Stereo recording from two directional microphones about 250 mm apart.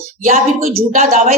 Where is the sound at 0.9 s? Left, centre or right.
Right.